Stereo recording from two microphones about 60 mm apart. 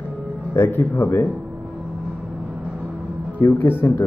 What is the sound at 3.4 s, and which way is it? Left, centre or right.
Speech, left.